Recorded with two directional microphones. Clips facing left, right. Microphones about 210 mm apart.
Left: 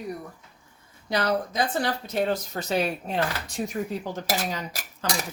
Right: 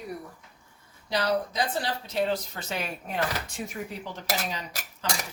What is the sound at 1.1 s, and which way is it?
Speech, 50° left (ahead or behind).